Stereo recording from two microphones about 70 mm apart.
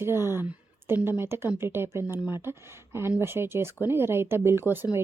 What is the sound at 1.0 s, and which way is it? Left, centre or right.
Speech, right.